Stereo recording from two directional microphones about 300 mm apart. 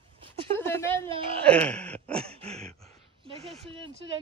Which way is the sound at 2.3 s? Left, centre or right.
Right.